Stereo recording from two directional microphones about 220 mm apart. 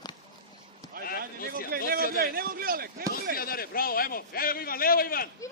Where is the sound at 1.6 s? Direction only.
40° right (ahead or behind).